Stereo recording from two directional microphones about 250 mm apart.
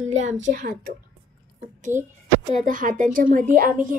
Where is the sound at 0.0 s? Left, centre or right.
Right.